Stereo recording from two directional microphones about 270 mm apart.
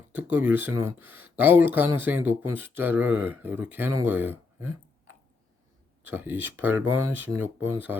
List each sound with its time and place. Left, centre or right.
0.1 s speech: centre